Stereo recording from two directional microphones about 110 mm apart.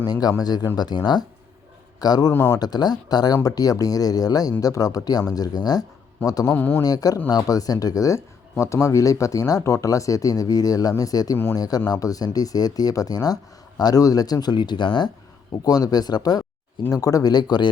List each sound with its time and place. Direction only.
0.1 s speech: 35° left (ahead or behind)
2.3 s speech: 20° left (ahead or behind)
2.6 s speech: 40° left (ahead or behind)
6.5 s speech: 20° left (ahead or behind)
6.8 s speech: 35° left (ahead or behind)
15.6 s speech: 35° left (ahead or behind)